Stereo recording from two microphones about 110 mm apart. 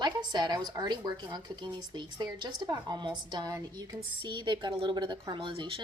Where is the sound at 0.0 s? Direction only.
40° right (ahead or behind).